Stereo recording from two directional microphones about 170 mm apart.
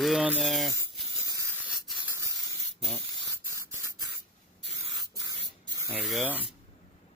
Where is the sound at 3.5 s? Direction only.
15° right (ahead or behind).